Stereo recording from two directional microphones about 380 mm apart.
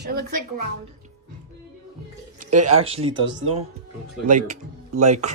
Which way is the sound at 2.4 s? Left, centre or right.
Centre.